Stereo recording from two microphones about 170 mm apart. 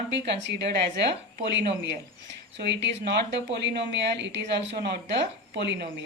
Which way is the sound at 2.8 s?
90° right.